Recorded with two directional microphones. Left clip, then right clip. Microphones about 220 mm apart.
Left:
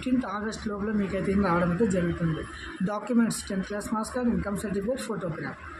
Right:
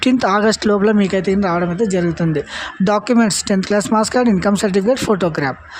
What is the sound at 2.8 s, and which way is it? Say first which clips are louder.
Speech: right 13 dB; 40° right (ahead or behind).